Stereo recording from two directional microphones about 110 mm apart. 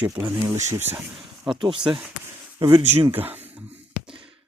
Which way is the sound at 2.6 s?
50° right (ahead or behind).